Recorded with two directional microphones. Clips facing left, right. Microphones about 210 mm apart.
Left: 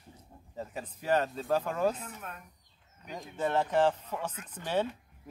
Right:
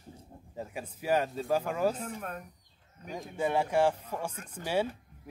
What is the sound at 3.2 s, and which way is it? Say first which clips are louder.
Speech: right 1 dB; 10° right (ahead or behind).